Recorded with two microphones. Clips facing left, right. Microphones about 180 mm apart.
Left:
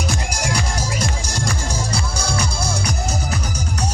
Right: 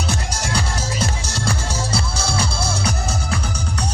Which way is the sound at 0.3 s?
10° left (ahead or behind).